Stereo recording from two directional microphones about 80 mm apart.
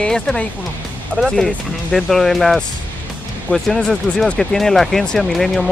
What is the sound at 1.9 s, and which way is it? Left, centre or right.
Speech, centre.